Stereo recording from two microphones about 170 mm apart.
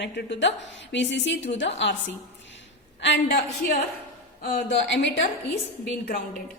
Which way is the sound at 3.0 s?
80° left.